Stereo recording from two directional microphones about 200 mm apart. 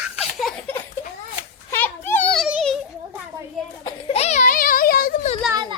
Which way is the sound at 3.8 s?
30° left (ahead or behind).